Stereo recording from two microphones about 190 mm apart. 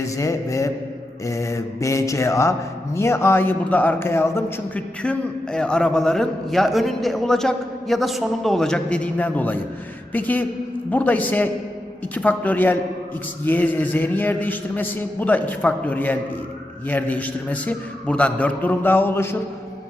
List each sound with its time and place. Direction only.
0.0 s speech: 15° left (ahead or behind)